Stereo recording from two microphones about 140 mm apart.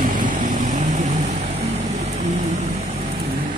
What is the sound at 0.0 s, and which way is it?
Vehicle, 70° right (ahead or behind).